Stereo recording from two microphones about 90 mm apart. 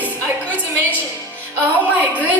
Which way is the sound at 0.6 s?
20° left (ahead or behind).